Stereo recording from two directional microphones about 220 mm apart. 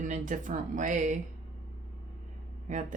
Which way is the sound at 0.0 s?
35° right (ahead or behind).